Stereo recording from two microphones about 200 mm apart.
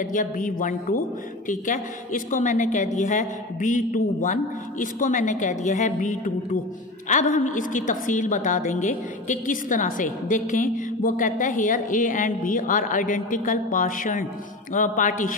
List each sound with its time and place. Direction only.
0.0 s a woman's voice: 40° left (ahead or behind)